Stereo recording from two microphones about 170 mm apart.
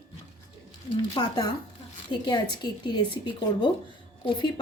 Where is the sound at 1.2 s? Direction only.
25° left (ahead or behind).